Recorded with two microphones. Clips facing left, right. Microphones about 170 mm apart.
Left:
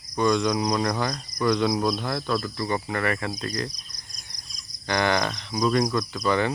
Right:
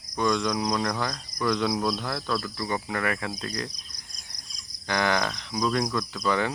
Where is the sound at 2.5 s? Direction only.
5° right (ahead or behind).